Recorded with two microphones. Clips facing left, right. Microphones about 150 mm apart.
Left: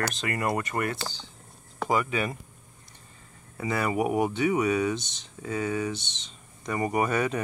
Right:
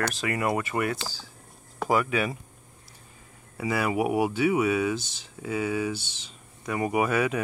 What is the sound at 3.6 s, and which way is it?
Speech, 5° right (ahead or behind).